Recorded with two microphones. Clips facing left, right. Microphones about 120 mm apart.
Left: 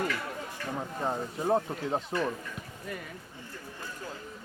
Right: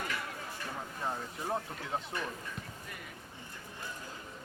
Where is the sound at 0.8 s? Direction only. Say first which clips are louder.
Left 6 dB; 30° left (ahead or behind).